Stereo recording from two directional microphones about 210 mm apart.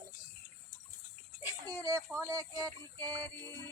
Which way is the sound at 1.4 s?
10° right (ahead or behind).